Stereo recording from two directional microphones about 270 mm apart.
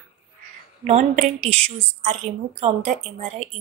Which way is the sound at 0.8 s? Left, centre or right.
Right.